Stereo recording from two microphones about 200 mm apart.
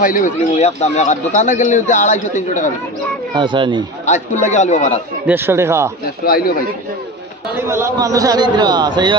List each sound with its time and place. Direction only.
0.0 s speech: 40° left (ahead or behind)
3.3 s a man's voice: 25° right (ahead or behind)
4.0 s speech: 35° left (ahead or behind)
5.2 s speech: 10° right (ahead or behind)
6.2 s speech: 50° left (ahead or behind)
7.6 s a man's voice: 15° right (ahead or behind)